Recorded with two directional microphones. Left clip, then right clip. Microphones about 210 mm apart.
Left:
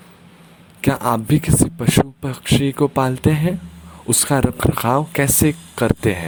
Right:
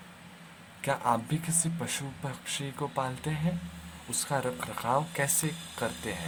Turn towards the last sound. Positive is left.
turn(degrees=45)  # may be behind; listen again after turning